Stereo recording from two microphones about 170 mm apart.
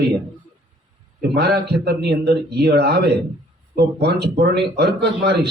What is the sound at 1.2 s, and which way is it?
Speech, 70° right (ahead or behind).